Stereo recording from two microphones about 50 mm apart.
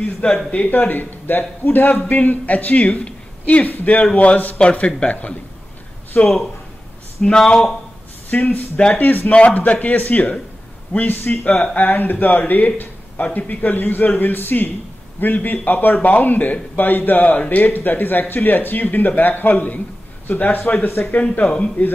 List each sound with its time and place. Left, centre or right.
0.5 s speech: left
7.2 s speech: centre
8.3 s speech: left